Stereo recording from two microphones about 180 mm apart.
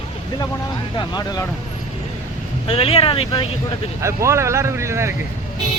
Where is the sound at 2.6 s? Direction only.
30° left (ahead or behind).